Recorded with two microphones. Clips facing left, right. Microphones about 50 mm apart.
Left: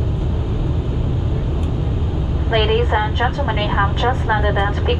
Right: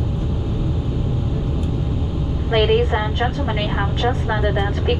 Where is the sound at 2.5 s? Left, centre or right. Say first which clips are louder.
Even; centre.